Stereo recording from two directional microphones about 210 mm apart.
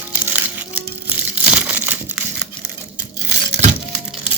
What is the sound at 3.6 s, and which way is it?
Crumpling, 35° right (ahead or behind).